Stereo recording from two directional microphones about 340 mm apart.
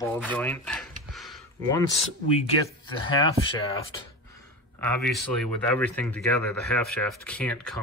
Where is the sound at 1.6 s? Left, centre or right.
Centre.